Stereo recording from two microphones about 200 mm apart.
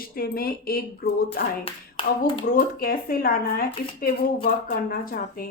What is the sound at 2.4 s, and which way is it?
A woman's voice, 45° left (ahead or behind).